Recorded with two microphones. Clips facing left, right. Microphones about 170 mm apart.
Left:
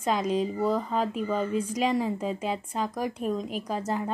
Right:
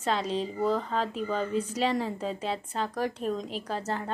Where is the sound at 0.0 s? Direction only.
10° left (ahead or behind).